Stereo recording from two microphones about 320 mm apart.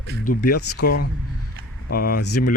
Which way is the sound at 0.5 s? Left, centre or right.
Left.